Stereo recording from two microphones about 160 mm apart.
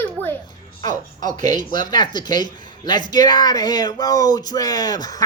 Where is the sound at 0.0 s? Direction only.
10° left (ahead or behind).